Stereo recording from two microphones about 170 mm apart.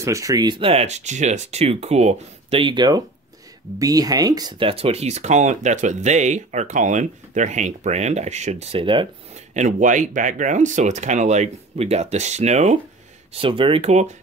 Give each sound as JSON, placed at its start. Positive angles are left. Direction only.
{"t": 0.0, "sound": "speech", "side_deg": -20}
{"t": 9.5, "sound": "speech", "side_deg": -45}